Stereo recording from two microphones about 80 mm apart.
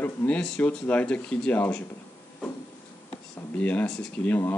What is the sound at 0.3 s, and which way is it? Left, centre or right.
Speech, centre.